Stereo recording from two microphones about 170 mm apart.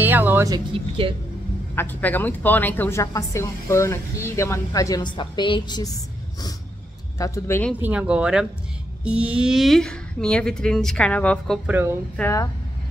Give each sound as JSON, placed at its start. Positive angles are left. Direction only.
{"t": 0.0, "sound": "music", "side_deg": -10}
{"t": 1.8, "sound": "a woman's voice", "side_deg": 10}
{"t": 7.2, "sound": "a woman's voice", "side_deg": 20}
{"t": 7.8, "sound": "a woman's voice", "side_deg": -10}
{"t": 11.6, "sound": "speech", "side_deg": -10}
{"t": 12.2, "sound": "a woman's voice", "side_deg": 20}